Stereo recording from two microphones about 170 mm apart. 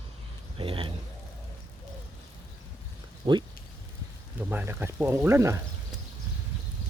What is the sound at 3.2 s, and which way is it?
Speech, 30° right (ahead or behind).